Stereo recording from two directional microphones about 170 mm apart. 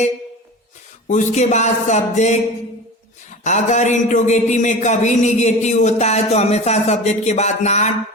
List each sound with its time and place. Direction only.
1.0 s a man's voice: 45° left (ahead or behind)
3.4 s a man's voice: 45° left (ahead or behind)